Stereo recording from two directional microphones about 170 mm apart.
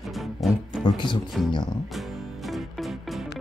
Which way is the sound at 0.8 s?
30° left (ahead or behind).